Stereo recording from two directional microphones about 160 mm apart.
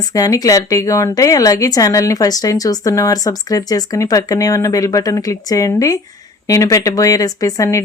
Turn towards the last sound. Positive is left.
turn(degrees=20)  # may be behind; listen again after turning